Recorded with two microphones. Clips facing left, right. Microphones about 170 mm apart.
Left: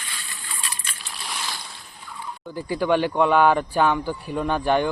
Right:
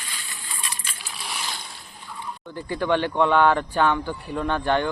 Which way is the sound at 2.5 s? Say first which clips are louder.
Left 2 dB; 10° left (ahead or behind).